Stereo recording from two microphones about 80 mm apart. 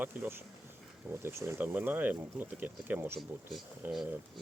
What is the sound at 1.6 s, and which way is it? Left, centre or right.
Speech, right.